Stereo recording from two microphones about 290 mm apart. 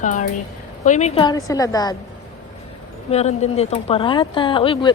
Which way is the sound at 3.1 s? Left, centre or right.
Left.